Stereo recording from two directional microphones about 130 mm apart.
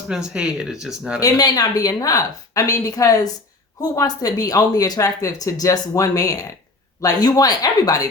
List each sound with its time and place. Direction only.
0.1 s speech: 5° right (ahead or behind)
1.2 s speech: 25° left (ahead or behind)